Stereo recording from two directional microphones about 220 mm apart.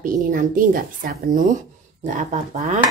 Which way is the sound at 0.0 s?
40° right (ahead or behind).